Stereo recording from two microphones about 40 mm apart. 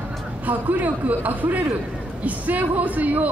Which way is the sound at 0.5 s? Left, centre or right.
Right.